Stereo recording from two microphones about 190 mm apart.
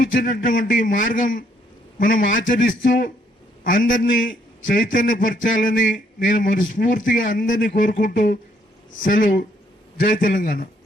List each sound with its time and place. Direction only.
0.4 s speech: 45° left (ahead or behind)